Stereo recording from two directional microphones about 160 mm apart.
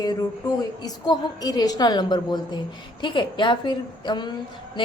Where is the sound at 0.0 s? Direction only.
25° left (ahead or behind).